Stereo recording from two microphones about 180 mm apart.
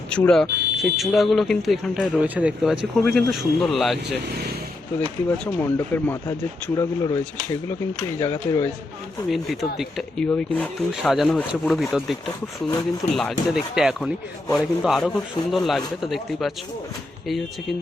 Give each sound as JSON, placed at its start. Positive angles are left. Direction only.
{"t": 0.1, "sound": "speech", "side_deg": 5}
{"t": 5.5, "sound": "speech", "side_deg": 10}
{"t": 9.3, "sound": "speech", "side_deg": 0}
{"t": 13.1, "sound": "speech", "side_deg": 0}